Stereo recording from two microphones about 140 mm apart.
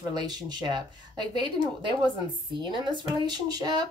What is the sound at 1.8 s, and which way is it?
Speech, 35° right (ahead or behind).